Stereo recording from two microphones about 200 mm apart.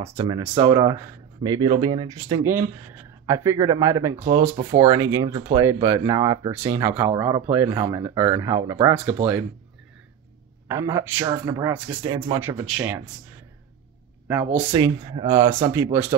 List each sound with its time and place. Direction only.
0.0 s speech: 25° right (ahead or behind)
10.7 s speech: 15° right (ahead or behind)
12.4 s speech: 10° right (ahead or behind)
14.2 s speech: 5° right (ahead or behind)